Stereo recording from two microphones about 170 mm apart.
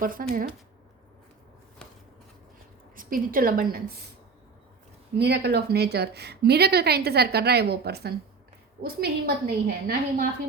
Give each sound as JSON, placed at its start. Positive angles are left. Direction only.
{"t": 0.0, "sound": "a woman's voice", "side_deg": -55}
{"t": 2.9, "sound": "a woman's voice", "side_deg": -55}
{"t": 5.1, "sound": "a woman's voice", "side_deg": -70}